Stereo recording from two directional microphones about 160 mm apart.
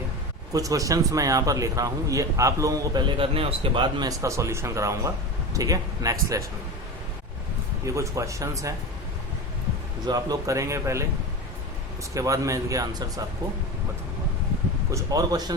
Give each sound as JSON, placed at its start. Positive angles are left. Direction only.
{"t": 0.5, "sound": "a man's voice", "side_deg": -20}
{"t": 3.2, "sound": "a man's voice", "side_deg": -35}
{"t": 7.9, "sound": "a man's voice", "side_deg": -20}
{"t": 10.1, "sound": "a man's voice", "side_deg": -20}
{"t": 12.1, "sound": "a man's voice", "side_deg": -20}
{"t": 14.8, "sound": "a man's voice", "side_deg": -20}